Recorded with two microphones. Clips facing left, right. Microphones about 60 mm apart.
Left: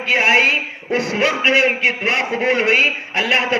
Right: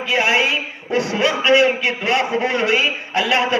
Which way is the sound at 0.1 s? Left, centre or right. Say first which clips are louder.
Left 3 dB; left.